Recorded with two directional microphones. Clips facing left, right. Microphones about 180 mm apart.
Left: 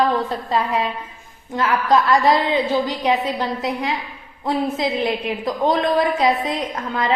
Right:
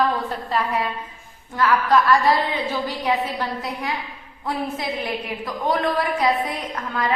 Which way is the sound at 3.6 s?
20° left (ahead or behind).